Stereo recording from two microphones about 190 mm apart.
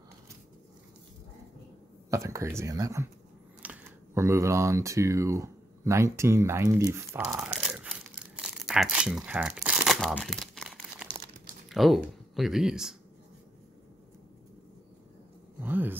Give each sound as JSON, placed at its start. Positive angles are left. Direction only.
{"t": 2.0, "sound": "speech", "side_deg": -15}
{"t": 7.3, "sound": "tearing", "side_deg": -10}
{"t": 11.7, "sound": "speech", "side_deg": 0}
{"t": 15.6, "sound": "speech", "side_deg": -10}